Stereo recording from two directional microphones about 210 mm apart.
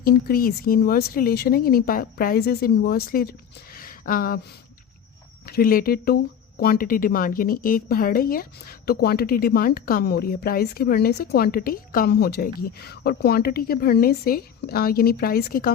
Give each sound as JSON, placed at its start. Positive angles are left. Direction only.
{"t": 0.0, "sound": "a woman's voice", "side_deg": 45}
{"t": 5.5, "sound": "a woman's voice", "side_deg": 45}